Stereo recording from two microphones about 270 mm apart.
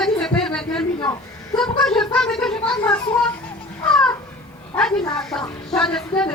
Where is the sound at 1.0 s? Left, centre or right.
Centre.